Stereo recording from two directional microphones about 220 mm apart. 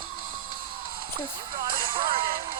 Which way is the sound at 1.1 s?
20° right (ahead or behind).